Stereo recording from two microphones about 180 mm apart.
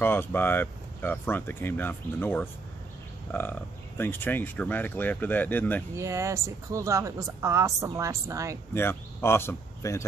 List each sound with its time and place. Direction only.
0.0 s speech: 10° left (ahead or behind)
3.3 s frog: 10° left (ahead or behind)
4.0 s speech: 10° left (ahead or behind)
5.9 s speech: 15° right (ahead or behind)
8.7 s speech: 15° left (ahead or behind)